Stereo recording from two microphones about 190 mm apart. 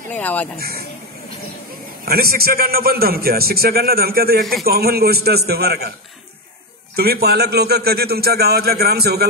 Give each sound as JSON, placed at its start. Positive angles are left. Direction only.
{"t": 0.1, "sound": "speech", "side_deg": 10}
{"t": 0.6, "sound": "a man's voice", "side_deg": -55}
{"t": 2.0, "sound": "a man's voice", "side_deg": -50}
{"t": 7.0, "sound": "a man's voice", "side_deg": -55}